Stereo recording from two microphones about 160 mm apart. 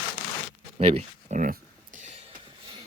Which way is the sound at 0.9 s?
45° right (ahead or behind).